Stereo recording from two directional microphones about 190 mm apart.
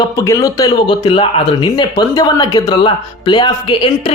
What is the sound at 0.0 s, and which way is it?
Speech, 20° left (ahead or behind).